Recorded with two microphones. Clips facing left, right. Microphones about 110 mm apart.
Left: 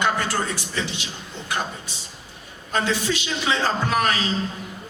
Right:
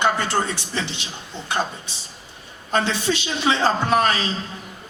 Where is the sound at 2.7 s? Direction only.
25° right (ahead or behind).